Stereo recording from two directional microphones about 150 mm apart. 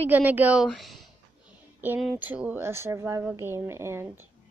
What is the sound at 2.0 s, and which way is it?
Speech, 10° right (ahead or behind).